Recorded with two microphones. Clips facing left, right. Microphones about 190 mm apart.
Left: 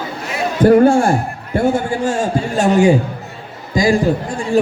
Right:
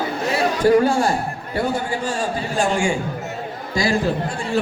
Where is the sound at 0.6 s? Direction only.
55° left (ahead or behind).